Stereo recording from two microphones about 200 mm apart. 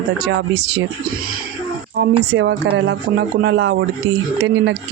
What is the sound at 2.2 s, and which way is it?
Speech, 60° right (ahead or behind).